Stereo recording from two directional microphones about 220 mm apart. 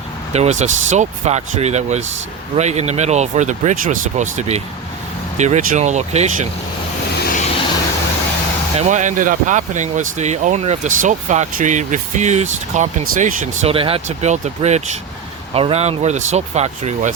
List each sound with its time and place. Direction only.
0.3 s speech: 30° right (ahead or behind)
7.2 s vehicle: 40° left (ahead or behind)
8.8 s speech: 35° right (ahead or behind)